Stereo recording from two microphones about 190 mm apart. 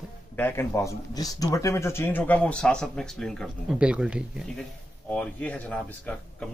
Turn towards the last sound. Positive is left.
turn(degrees=5)  # may be behind; listen again after turning